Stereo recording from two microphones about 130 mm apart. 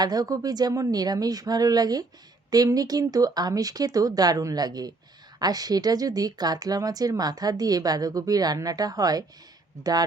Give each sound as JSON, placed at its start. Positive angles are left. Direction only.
{"t": 0.0, "sound": "speech", "side_deg": -30}